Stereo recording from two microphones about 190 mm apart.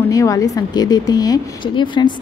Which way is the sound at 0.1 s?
15° left (ahead or behind).